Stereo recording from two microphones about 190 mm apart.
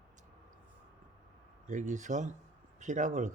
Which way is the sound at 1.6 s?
40° right (ahead or behind).